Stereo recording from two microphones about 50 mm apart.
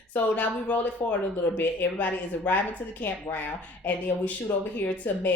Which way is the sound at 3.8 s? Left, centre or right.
Left.